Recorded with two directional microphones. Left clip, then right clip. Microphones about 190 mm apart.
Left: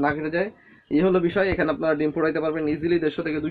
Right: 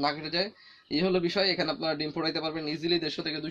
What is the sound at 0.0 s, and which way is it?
A man's voice, 35° right (ahead or behind).